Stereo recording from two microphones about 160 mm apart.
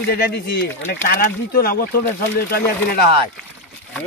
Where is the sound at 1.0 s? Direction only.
70° left (ahead or behind).